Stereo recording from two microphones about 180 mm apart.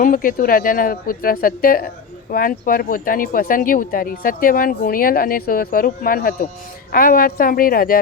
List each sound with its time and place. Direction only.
0.0 s speech: 50° left (ahead or behind)